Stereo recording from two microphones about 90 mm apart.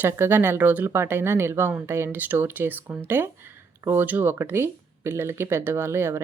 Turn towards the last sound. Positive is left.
turn(degrees=-30)  # may be behind; listen again after turning